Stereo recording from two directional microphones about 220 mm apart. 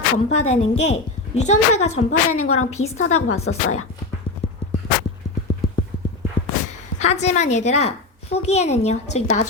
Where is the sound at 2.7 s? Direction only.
30° left (ahead or behind).